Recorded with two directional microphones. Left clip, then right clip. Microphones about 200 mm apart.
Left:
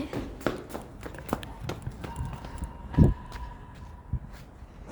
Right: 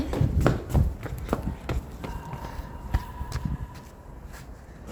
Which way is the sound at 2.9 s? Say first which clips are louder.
Left 11 dB; 60° right (ahead or behind).